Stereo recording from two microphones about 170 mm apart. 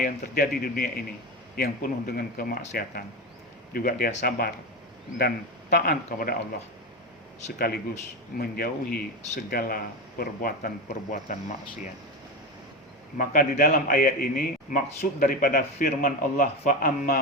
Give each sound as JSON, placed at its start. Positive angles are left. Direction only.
{"t": 0.0, "sound": "a man's voice", "side_deg": 65}
{"t": 5.7, "sound": "a man's voice", "side_deg": 60}
{"t": 7.4, "sound": "a man's voice", "side_deg": 65}
{"t": 11.1, "sound": "speech", "side_deg": 45}
{"t": 13.1, "sound": "a man's voice", "side_deg": 55}